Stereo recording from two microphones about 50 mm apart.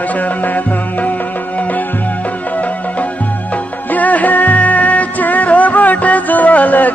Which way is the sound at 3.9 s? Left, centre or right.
Left.